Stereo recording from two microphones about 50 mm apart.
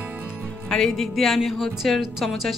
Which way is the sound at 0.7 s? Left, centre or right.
Centre.